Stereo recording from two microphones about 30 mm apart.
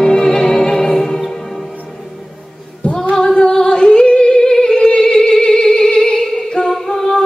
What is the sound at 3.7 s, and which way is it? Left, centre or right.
Singing, left.